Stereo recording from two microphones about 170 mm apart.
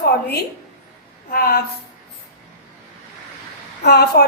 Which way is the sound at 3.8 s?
75° left (ahead or behind).